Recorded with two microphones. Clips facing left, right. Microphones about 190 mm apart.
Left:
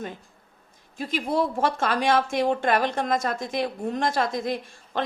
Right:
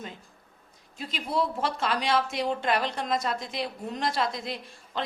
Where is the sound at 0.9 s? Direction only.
50° left (ahead or behind).